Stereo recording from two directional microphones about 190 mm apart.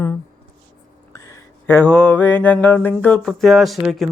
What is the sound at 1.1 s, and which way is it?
Mantra, 15° left (ahead or behind).